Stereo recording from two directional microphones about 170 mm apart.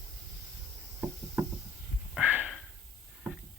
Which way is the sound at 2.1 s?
10° right (ahead or behind).